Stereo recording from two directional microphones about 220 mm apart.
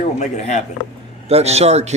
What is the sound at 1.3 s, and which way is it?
Speech, 30° right (ahead or behind).